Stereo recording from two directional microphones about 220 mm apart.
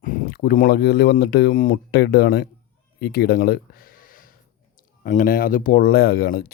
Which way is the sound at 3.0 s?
45° left (ahead or behind).